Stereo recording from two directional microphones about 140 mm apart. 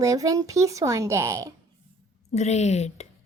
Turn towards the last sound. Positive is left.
turn(degrees=55)  # may be behind; listen again after turning